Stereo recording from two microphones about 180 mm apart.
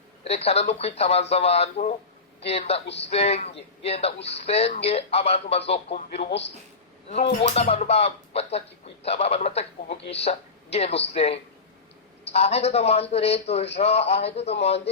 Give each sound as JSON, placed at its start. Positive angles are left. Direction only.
{"t": 0.3, "sound": "a man's voice", "side_deg": 35}
{"t": 7.4, "sound": "a man's voice", "side_deg": 35}